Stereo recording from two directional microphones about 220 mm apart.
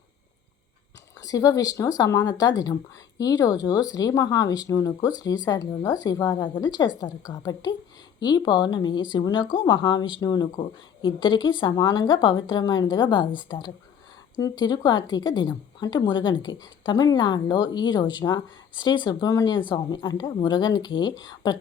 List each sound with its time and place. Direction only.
1.2 s a woman's voice: 15° left (ahead or behind)